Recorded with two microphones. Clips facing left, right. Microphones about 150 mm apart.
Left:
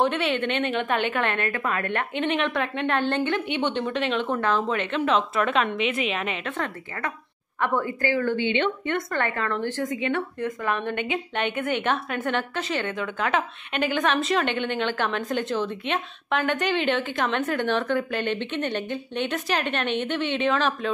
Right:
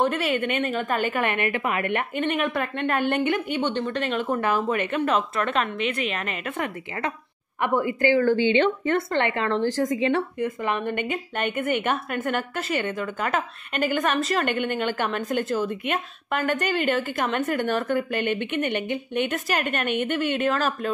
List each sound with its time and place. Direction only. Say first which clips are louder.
0.0 s a woman's voice: even; 5° right (ahead or behind)
6.5 s a woman's voice: right 1 dB; 15° right (ahead or behind)
8.0 s a woman's voice: right 7 dB; 30° right (ahead or behind)
9.1 s a woman's voice: right 3 dB; 25° right (ahead or behind)
10.4 s a woman's voice: right 1 dB; 10° right (ahead or behind)